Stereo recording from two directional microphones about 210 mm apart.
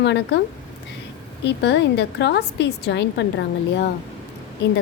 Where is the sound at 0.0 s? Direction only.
55° left (ahead or behind).